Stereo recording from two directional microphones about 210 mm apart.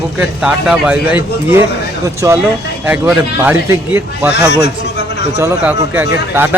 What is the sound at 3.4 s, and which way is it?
Speech, 10° right (ahead or behind).